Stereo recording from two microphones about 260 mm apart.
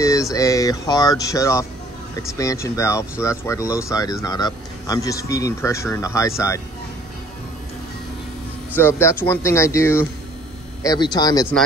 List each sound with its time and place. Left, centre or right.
0.0 s speech: centre
8.7 s speech: centre